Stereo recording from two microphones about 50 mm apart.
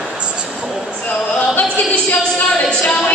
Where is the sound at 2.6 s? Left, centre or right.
Centre.